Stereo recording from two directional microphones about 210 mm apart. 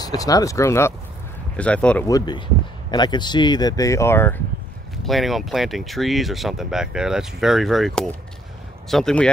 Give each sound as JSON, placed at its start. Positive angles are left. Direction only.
{"t": 0.2, "sound": "speech", "side_deg": 15}
{"t": 2.0, "sound": "speech", "side_deg": 20}
{"t": 5.0, "sound": "speech", "side_deg": 0}